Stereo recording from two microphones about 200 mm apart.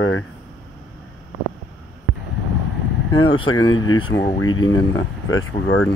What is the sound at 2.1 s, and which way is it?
Vehicle, 45° left (ahead or behind).